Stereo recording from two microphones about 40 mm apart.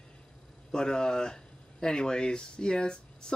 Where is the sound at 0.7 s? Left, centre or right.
Centre.